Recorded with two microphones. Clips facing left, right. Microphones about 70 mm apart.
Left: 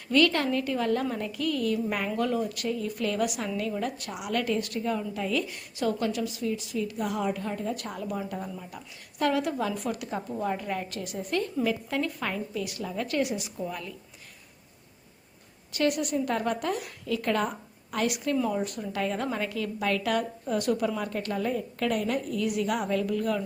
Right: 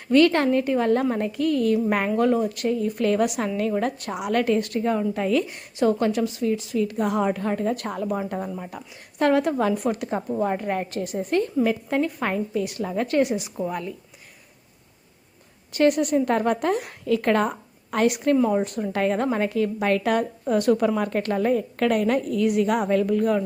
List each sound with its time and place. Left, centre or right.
0.1 s a woman's voice: right
5.5 s a woman's voice: right
15.7 s a woman's voice: right
20.8 s a woman's voice: right